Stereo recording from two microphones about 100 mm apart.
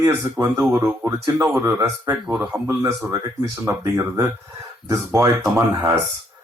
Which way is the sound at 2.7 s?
30° right (ahead or behind).